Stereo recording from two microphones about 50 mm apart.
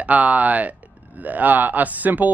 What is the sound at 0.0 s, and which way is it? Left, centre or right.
Speech, right.